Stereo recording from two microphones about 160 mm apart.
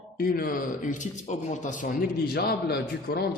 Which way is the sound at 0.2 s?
65° left (ahead or behind).